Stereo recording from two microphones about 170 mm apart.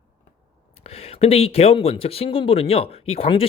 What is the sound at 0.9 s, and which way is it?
Speech, 35° left (ahead or behind).